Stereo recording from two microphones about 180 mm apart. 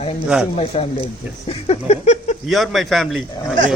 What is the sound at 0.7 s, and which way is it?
Speech, 30° left (ahead or behind).